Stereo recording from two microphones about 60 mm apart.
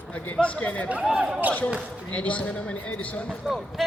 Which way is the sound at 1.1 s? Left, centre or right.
Centre.